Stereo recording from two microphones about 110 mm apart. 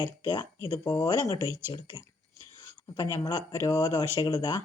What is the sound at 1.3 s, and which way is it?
Speech, 25° right (ahead or behind).